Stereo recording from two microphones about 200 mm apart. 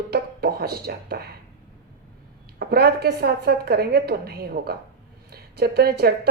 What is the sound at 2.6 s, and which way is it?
A woman's voice, 50° right (ahead or behind).